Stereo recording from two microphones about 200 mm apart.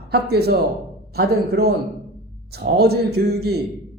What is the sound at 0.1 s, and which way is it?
A woman's voice, 55° right (ahead or behind).